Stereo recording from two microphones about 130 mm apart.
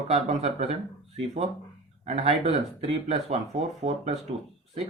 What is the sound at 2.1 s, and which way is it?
Speech, 50° right (ahead or behind).